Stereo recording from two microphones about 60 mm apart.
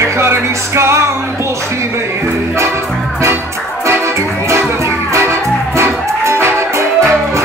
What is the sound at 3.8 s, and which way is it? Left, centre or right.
Music, right.